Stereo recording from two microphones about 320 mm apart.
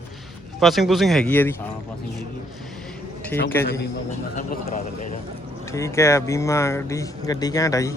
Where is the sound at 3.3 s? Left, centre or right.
Centre.